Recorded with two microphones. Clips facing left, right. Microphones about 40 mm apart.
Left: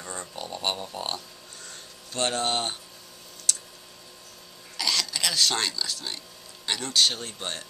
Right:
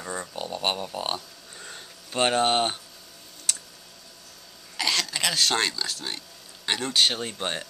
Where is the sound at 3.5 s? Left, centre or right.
Right.